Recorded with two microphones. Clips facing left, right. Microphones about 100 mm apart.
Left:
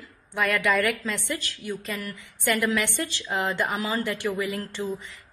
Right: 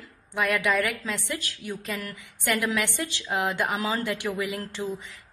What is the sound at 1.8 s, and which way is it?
Speech, 20° right (ahead or behind).